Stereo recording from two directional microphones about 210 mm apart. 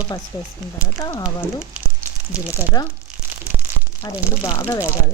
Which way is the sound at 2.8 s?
20° left (ahead or behind).